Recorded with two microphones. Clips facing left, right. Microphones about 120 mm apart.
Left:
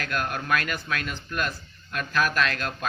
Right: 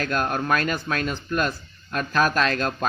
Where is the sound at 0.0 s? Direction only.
35° right (ahead or behind).